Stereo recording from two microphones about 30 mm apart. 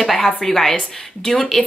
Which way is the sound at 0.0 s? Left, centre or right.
Centre.